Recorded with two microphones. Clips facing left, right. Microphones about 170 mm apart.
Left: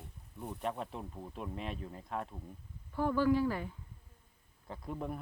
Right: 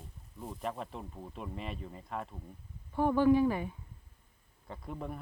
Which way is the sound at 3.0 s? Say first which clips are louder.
Right 4 dB; 20° right (ahead or behind).